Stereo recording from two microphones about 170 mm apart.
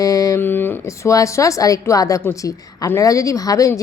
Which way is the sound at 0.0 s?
20° left (ahead or behind).